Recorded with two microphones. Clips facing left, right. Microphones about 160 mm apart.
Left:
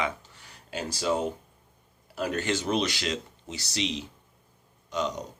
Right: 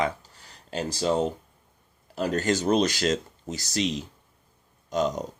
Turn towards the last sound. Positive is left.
turn(degrees=-45)  # may be behind; listen again after turning